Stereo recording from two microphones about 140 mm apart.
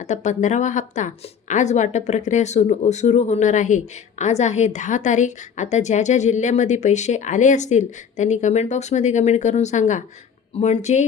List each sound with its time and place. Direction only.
0.0 s a woman's voice: 60° left (ahead or behind)